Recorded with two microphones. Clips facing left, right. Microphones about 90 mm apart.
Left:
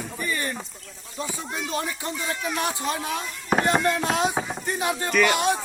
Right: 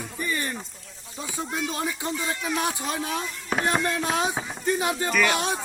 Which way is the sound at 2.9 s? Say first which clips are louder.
Left 1 dB; 25° left (ahead or behind).